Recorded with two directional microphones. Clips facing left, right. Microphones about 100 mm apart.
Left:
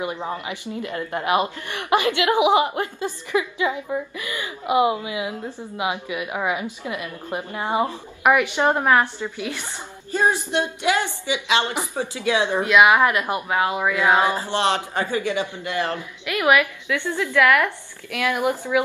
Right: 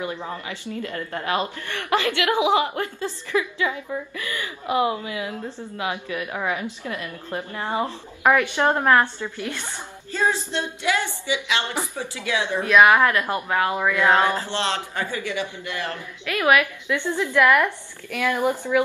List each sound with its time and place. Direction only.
0.0 s a man's voice: 20° left (ahead or behind)
16.8 s a woman's voice: 15° right (ahead or behind)
18.1 s a woman's voice: 15° left (ahead or behind)